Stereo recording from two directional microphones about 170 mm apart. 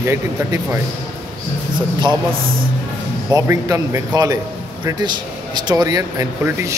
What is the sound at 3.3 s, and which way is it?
Speech, 20° right (ahead or behind).